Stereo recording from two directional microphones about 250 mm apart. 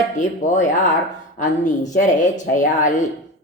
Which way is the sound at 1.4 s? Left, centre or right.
Left.